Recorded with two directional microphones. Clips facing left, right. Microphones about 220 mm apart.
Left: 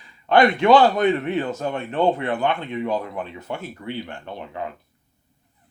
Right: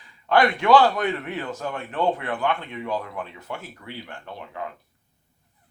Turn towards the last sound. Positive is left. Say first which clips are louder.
# left 3 dB
turn(degrees=25)  # may be behind; listen again after turning